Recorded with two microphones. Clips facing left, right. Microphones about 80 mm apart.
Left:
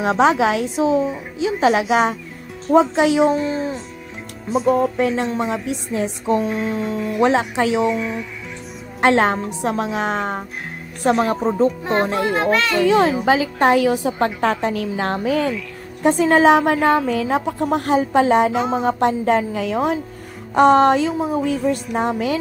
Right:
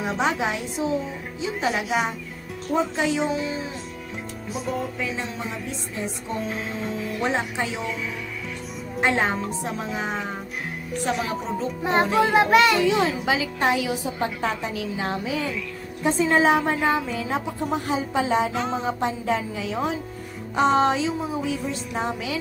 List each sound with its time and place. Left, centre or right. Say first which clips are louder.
0.0 s a woman's voice: left 8 dB; left
2.7 s a woman's voice: left 9 dB; left
3.3 s speech: left 8 dB; left
4.6 s a woman's voice: left 11 dB; left
6.7 s speech: left 6 dB; left
7.2 s a woman's voice: left 9 dB; left
7.8 s speech: left 10 dB; centre
9.0 s a woman's voice: left 7 dB; left
11.1 s speech: left 10 dB; left
12.4 s a child's voice: right 4 dB; centre
12.8 s speech: left 6 dB; left
14.0 s a woman's voice: left 7 dB; left